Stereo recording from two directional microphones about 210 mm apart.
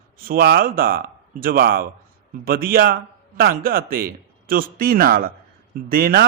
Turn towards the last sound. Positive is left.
turn(degrees=-45)  # may be behind; listen again after turning